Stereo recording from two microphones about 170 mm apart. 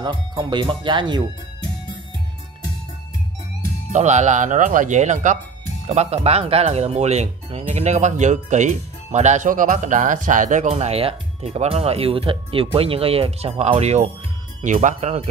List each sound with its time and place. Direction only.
0.0 s speech: 25° right (ahead or behind)
3.9 s speech: 45° right (ahead or behind)